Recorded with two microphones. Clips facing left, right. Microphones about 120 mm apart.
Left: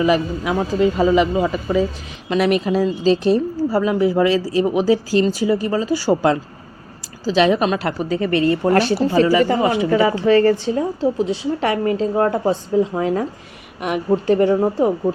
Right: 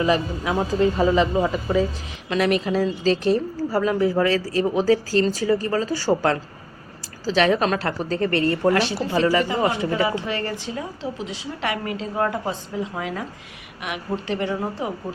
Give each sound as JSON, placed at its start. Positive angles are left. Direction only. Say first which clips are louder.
{"t": 0.0, "sound": "a woman's voice", "louder": "left 4 dB", "side_deg": 10}
{"t": 8.7, "sound": "speech", "louder": "left 6 dB", "side_deg": 45}
{"t": 9.6, "sound": "a woman's voice", "louder": "left 5 dB", "side_deg": 15}
{"t": 10.2, "sound": "a woman's voice", "louder": "left 13 dB", "side_deg": 35}